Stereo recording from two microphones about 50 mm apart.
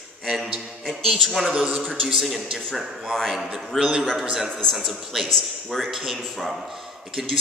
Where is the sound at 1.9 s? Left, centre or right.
Centre.